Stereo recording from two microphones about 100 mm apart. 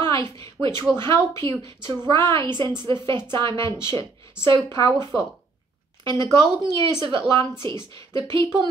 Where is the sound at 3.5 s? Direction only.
30° left (ahead or behind).